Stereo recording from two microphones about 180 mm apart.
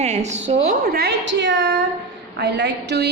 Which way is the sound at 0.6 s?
55° right (ahead or behind).